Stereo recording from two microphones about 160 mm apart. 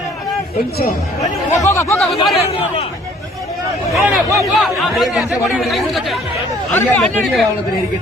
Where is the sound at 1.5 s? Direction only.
20° left (ahead or behind).